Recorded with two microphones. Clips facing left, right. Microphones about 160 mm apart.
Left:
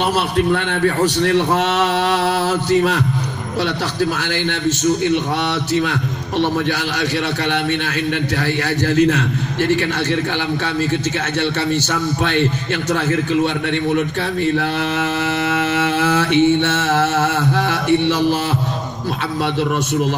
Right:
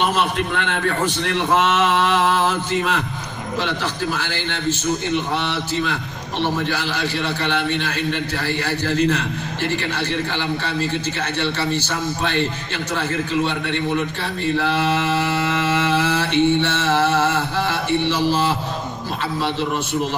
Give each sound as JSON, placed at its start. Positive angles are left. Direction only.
{"t": 0.0, "sound": "a man's voice", "side_deg": 40}
{"t": 5.5, "sound": "a man's voice", "side_deg": 65}
{"t": 14.6, "sound": "mantra", "side_deg": 55}